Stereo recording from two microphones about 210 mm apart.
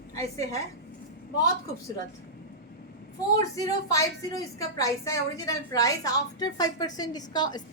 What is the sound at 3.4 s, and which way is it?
A child's voice, 15° left (ahead or behind).